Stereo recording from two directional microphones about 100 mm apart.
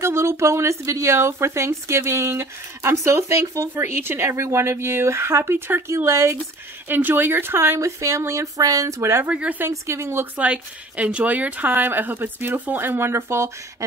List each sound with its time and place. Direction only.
0.0 s a woman's voice: 25° right (ahead or behind)
9.3 s speech: 15° right (ahead or behind)
9.7 s a woman's voice: 30° right (ahead or behind)